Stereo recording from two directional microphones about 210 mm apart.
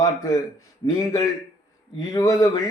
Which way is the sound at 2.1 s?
15° left (ahead or behind).